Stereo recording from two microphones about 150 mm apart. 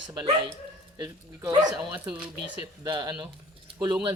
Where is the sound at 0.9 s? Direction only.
25° right (ahead or behind).